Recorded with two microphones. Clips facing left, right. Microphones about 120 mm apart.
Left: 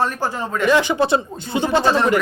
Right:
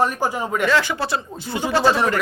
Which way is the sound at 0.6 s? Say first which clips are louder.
Left 5 dB; 20° left (ahead or behind).